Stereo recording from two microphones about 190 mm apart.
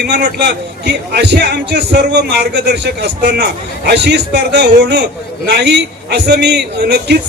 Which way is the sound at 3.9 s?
65° right (ahead or behind).